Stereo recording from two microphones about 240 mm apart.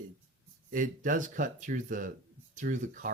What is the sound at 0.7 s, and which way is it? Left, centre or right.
Speech, right.